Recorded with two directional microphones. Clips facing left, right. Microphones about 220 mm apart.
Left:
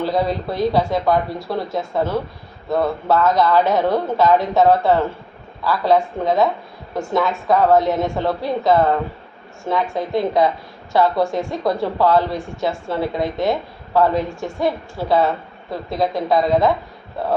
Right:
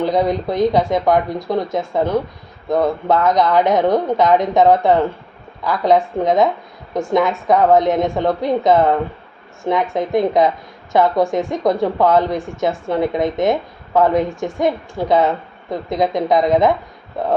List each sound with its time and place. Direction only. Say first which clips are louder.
0.0 s a woman's voice: right 3 dB; 20° right (ahead or behind)
9.9 s a woman's voice: right 4 dB; 20° right (ahead or behind)